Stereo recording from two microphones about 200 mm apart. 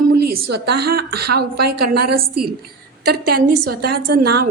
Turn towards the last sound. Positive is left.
turn(degrees=-50)  # may be behind; listen again after turning